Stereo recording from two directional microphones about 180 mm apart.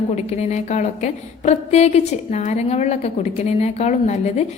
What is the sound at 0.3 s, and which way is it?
A woman's voice, 40° left (ahead or behind).